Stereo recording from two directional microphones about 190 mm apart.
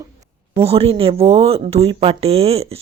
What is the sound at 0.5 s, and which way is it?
Speech, 30° right (ahead or behind).